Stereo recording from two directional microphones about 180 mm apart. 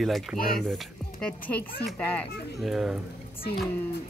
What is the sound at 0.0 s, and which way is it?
Speech, centre (ahead or behind).